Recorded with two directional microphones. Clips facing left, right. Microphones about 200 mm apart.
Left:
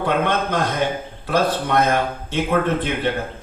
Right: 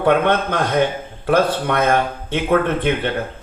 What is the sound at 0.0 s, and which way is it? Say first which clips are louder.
A man's voice: right 4 dB; 55° right (ahead or behind).